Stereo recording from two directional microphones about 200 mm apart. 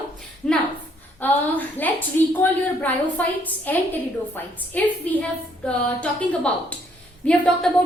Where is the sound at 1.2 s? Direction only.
10° left (ahead or behind).